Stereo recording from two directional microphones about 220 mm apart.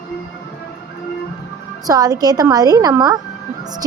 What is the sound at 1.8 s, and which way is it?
A woman's voice, 15° right (ahead or behind).